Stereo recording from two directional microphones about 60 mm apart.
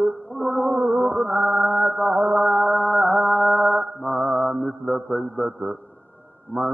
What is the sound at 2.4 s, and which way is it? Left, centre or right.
Mantra, centre.